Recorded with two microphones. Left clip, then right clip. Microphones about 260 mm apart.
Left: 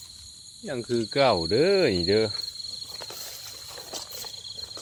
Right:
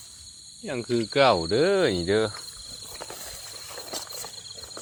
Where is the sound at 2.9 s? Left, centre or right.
Right.